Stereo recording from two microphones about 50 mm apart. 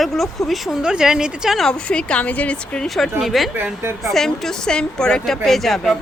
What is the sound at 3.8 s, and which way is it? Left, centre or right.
Speech, right.